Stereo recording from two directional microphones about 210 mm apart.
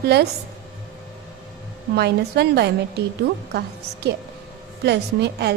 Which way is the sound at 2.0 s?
50° right (ahead or behind).